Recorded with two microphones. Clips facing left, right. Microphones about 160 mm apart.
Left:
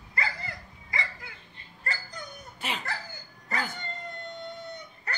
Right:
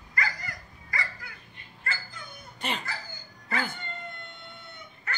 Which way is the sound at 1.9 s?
40° left (ahead or behind).